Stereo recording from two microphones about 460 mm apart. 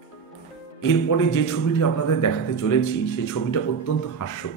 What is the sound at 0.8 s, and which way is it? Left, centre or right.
A man's voice, left.